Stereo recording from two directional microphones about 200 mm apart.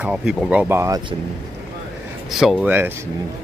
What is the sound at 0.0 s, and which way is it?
Speech, 5° right (ahead or behind).